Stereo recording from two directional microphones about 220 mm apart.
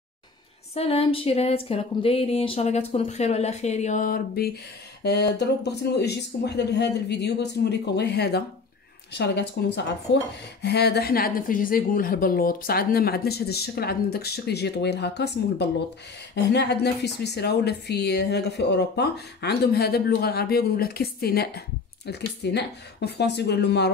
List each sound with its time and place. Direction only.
0.7 s a woman's voice: 25° left (ahead or behind); by 23.9 s 50° left (ahead or behind)